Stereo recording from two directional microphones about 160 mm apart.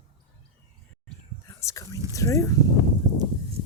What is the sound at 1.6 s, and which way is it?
Speech, 20° left (ahead or behind).